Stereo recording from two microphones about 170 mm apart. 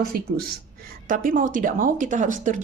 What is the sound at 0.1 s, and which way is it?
Speech, 65° right (ahead or behind).